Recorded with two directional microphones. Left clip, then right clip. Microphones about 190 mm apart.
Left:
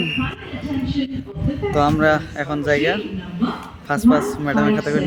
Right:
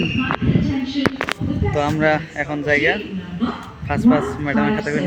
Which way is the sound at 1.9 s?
10° left (ahead or behind).